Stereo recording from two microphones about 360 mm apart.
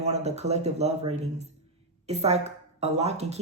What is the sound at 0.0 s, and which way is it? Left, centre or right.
A woman's voice, centre.